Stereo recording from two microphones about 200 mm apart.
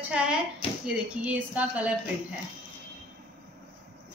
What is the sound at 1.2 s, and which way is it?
Speech, 5° right (ahead or behind).